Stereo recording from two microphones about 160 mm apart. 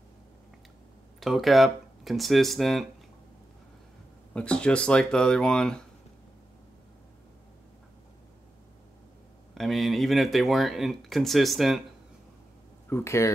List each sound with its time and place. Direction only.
1.2 s speech: centre (ahead or behind)
4.3 s speech: 5° left (ahead or behind)
9.5 s speech: centre (ahead or behind)
12.9 s speech: 15° left (ahead or behind)